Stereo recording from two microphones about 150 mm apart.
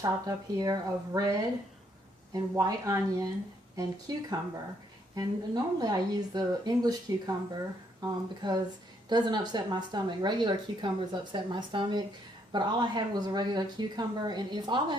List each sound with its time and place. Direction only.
0.0 s a woman's voice: 25° right (ahead or behind)
5.1 s a woman's voice: 25° right (ahead or behind)